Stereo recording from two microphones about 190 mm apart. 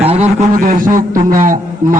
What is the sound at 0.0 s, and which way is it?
A man's voice, 35° right (ahead or behind).